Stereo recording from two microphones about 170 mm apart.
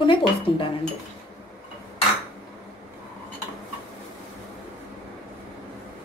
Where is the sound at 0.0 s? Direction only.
30° left (ahead or behind).